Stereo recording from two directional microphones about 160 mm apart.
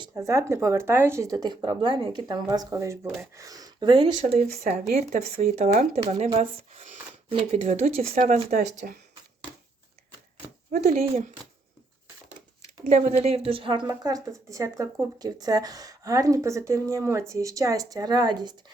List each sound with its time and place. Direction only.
0.0 s speech: 20° right (ahead or behind)
4.2 s speech: 45° right (ahead or behind)
8.4 s speech: 60° right (ahead or behind)
10.7 s speech: 45° right (ahead or behind)
12.8 s speech: 45° right (ahead or behind); by 18.5 s 25° right (ahead or behind)